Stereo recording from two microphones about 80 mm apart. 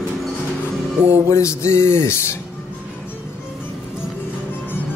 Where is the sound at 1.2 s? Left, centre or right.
Left.